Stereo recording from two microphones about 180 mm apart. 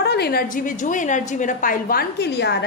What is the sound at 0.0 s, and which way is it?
A woman's voice, 65° left (ahead or behind).